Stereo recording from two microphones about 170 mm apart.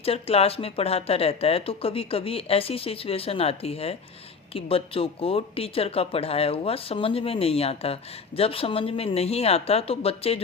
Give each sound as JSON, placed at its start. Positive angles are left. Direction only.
{"t": 0.0, "sound": "speech", "side_deg": 35}